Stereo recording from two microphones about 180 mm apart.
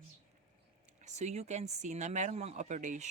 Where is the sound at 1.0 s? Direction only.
40° right (ahead or behind).